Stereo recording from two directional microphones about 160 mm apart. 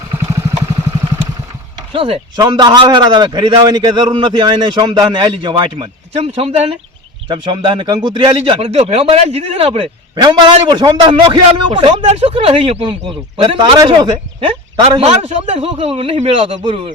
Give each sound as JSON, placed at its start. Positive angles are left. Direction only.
{"t": 1.9, "sound": "a man's voice", "side_deg": -35}
{"t": 14.8, "sound": "speech", "side_deg": -40}